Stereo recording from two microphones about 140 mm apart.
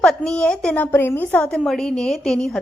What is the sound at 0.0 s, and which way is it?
A woman's voice, 5° left (ahead or behind).